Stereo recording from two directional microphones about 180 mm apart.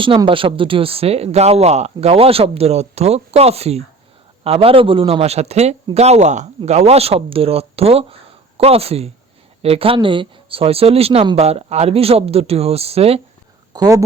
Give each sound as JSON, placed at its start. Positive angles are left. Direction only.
{"t": 0.0, "sound": "speech", "side_deg": -30}
{"t": 13.7, "sound": "speech", "side_deg": -20}